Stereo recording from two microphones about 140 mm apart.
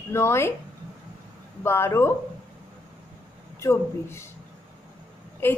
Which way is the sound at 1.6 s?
20° left (ahead or behind).